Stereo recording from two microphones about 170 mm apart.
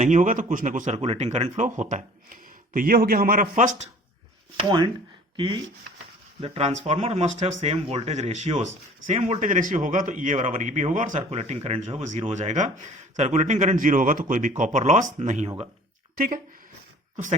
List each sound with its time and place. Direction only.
0.0 s speech: 45° right (ahead or behind)
0.9 s speech: 35° right (ahead or behind)
4.5 s speech: 30° right (ahead or behind); by 16.4 s 55° right (ahead or behind)